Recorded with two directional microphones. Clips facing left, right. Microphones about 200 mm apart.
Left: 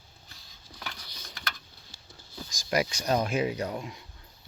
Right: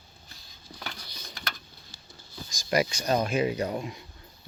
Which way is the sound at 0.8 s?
25° right (ahead or behind).